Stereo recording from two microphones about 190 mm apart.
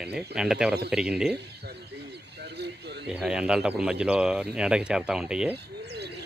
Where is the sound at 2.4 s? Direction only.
60° right (ahead or behind).